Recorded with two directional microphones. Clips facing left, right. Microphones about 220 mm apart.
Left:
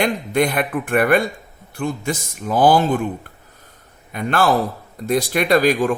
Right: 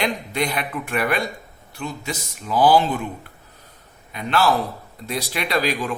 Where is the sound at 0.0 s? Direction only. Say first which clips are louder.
Left 6 dB; 50° left (ahead or behind).